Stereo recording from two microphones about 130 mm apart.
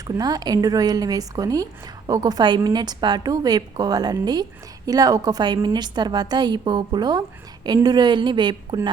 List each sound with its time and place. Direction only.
0.2 s a woman's voice: 30° right (ahead or behind)